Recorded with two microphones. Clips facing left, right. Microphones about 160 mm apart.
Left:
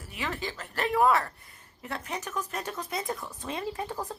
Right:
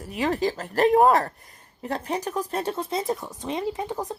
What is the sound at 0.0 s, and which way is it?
Speech, 40° right (ahead or behind).